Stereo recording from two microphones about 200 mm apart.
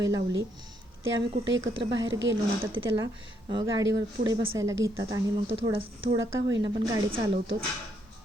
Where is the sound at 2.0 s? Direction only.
65° right (ahead or behind).